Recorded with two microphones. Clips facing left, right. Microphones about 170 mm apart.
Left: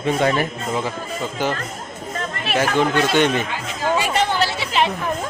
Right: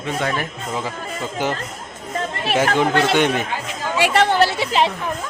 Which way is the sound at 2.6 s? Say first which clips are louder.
Even; 15° right (ahead or behind).